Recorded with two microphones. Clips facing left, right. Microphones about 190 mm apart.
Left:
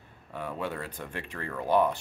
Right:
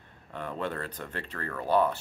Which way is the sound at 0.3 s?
10° left (ahead or behind).